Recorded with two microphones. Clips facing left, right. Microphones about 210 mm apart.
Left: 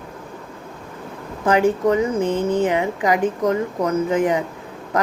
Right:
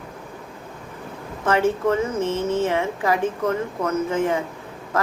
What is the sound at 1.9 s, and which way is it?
Speech, 15° left (ahead or behind).